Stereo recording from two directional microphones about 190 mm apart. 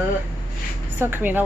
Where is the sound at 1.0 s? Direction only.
10° right (ahead or behind).